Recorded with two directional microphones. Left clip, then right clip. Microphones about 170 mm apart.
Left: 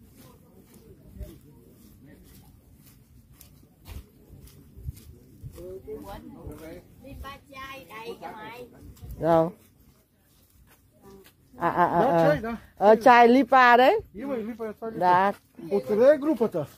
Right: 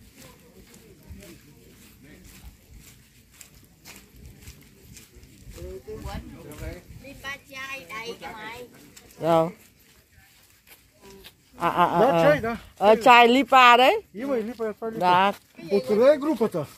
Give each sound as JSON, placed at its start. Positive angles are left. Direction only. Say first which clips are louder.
{"t": 7.2, "sound": "a child's voice", "louder": "right 6 dB", "side_deg": -5}
{"t": 9.2, "sound": "speech", "louder": "even", "side_deg": 15}
{"t": 11.5, "sound": "speech", "louder": "right 1 dB", "side_deg": 10}
{"t": 12.3, "sound": "speech", "louder": "right 4 dB", "side_deg": -35}
{"t": 12.7, "sound": "speech", "louder": "right 1 dB", "side_deg": 15}
{"t": 14.1, "sound": "speech", "louder": "right 5 dB", "side_deg": -35}
{"t": 15.0, "sound": "speech", "louder": "right 1 dB", "side_deg": 10}
{"t": 15.9, "sound": "speech", "louder": "even", "side_deg": -40}